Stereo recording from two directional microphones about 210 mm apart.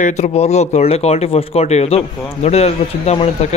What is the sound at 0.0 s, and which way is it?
Speech, 35° left (ahead or behind).